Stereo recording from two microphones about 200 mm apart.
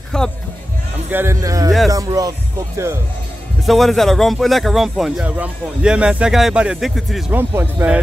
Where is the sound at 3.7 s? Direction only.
Centre (ahead or behind).